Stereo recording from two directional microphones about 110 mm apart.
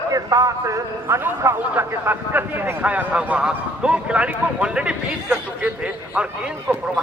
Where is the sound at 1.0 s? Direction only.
20° right (ahead or behind).